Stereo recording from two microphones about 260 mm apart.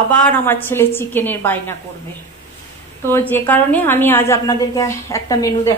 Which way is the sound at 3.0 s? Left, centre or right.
Centre.